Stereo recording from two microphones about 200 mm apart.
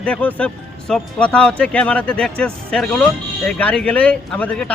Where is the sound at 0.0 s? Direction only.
5° left (ahead or behind).